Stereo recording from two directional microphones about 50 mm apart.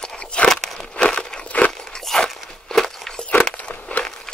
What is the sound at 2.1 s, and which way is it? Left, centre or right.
Walk, centre.